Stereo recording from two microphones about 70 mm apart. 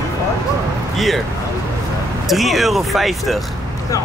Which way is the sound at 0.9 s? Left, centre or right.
Centre.